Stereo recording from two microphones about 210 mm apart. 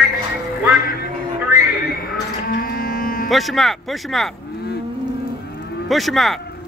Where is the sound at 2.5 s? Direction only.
45° left (ahead or behind).